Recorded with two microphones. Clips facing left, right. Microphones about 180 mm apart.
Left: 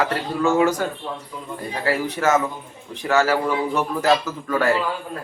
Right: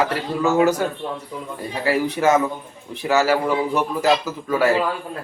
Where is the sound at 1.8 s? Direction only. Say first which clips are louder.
Right 3 dB; 15° right (ahead or behind).